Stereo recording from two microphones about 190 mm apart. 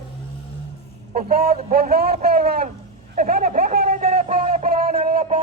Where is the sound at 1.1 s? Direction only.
50° right (ahead or behind).